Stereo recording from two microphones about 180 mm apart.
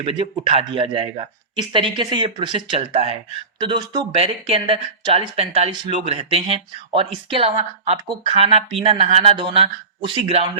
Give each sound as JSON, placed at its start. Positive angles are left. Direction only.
{"t": 0.0, "sound": "speech", "side_deg": -30}